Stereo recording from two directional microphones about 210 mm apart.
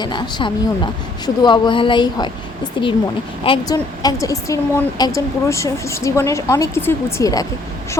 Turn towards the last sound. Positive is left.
turn(degrees=15)  # may be behind; listen again after turning